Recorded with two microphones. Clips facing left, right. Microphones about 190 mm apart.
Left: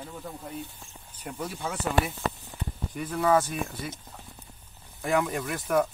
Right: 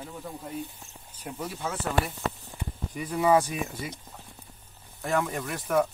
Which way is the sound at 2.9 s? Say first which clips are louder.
Right 1 dB; 5° right (ahead or behind).